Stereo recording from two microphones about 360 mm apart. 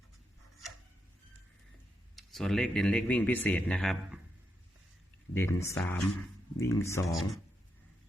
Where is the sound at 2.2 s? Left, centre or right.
Centre.